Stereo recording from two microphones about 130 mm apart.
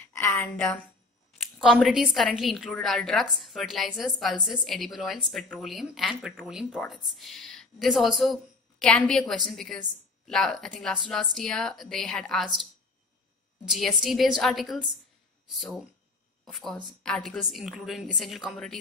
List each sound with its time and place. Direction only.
0.1 s a sound: 20° left (ahead or behind)
1.4 s a woman's voice: centre (ahead or behind)
13.7 s a woman's voice: centre (ahead or behind)